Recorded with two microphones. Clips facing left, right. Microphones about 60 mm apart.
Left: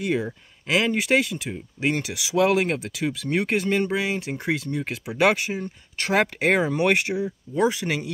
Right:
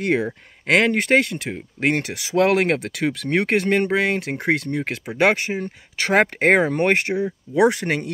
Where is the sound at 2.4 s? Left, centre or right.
Right.